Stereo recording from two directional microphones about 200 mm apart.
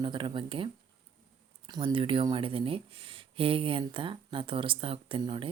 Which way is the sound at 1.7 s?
25° right (ahead or behind).